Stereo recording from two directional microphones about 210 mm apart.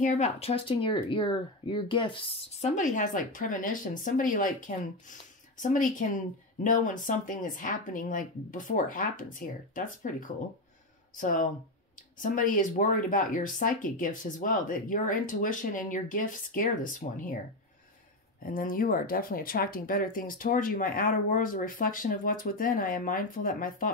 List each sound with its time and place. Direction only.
0.0 s speech: 30° left (ahead or behind)
18.4 s speech: 40° left (ahead or behind)